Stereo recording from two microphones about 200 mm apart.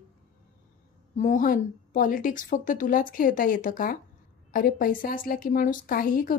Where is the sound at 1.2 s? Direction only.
40° left (ahead or behind).